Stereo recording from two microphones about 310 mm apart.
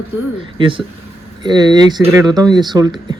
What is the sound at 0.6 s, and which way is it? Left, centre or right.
A man's voice, centre.